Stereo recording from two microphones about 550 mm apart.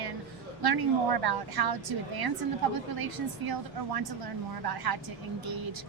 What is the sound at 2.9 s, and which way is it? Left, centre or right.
A woman's voice, right.